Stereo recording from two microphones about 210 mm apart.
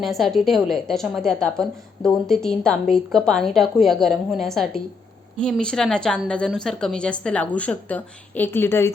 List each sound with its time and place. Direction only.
0.0 s a woman's voice: centre (ahead or behind)